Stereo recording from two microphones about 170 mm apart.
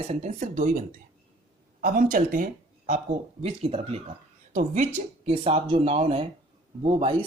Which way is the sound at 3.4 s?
35° right (ahead or behind).